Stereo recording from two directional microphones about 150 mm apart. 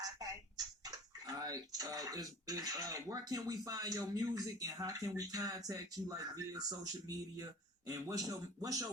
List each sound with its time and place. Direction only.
0.0 s a man's voice: 25° right (ahead or behind)